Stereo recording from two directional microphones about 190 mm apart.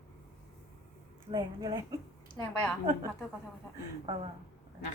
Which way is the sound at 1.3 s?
20° right (ahead or behind).